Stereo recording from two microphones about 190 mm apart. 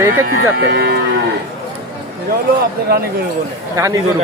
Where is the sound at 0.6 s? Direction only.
55° right (ahead or behind).